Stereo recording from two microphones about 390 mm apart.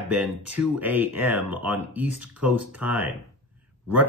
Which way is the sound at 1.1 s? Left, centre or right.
Right.